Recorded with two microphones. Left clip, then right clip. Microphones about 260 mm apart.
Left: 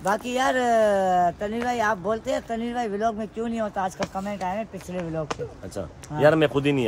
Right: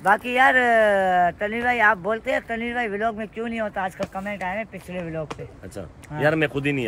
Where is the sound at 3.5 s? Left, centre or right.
Centre.